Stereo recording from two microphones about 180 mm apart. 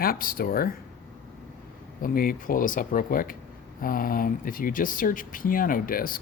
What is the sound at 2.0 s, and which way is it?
Speech, 50° left (ahead or behind).